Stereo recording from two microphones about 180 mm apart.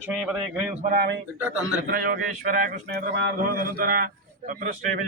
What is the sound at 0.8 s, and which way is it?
Speech, 55° right (ahead or behind).